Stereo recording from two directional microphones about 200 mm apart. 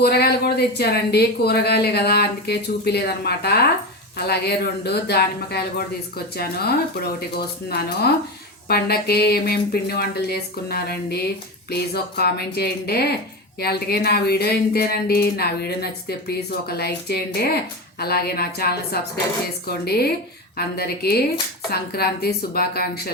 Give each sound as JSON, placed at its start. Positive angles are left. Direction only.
{"t": 0.0, "sound": "speech", "side_deg": 50}